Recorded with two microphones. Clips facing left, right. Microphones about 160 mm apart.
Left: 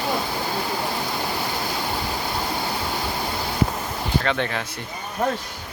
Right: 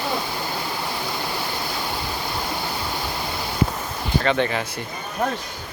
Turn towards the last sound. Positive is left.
turn(degrees=0)  # may be behind; listen again after turning